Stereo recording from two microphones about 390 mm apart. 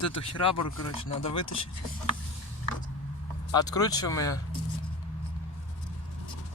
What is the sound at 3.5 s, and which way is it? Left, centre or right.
Speech, centre.